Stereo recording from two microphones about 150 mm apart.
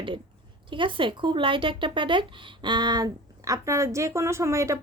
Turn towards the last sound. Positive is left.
turn(degrees=-20)  # may be behind; listen again after turning